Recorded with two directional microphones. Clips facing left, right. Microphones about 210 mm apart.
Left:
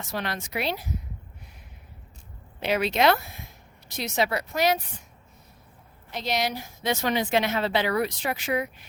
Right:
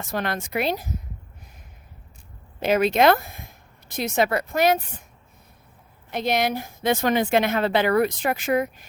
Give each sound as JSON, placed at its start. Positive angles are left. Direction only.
{"t": 0.0, "sound": "a woman's voice", "side_deg": -50}
{"t": 2.6, "sound": "a woman's voice", "side_deg": -45}
{"t": 6.1, "sound": "a woman's voice", "side_deg": -55}